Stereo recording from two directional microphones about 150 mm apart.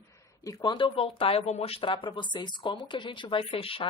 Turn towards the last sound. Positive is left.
turn(degrees=40)  # may be behind; listen again after turning